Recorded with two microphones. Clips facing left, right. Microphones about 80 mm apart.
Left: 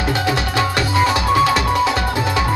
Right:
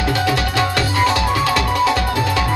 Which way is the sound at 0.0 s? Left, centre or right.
Left.